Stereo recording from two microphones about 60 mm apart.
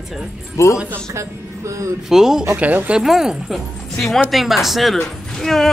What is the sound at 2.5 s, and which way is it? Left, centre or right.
Speech, right.